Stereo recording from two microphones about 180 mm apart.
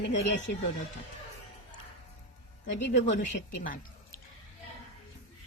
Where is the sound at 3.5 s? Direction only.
50° left (ahead or behind).